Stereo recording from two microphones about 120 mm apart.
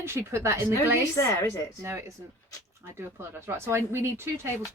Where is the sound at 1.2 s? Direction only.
25° left (ahead or behind).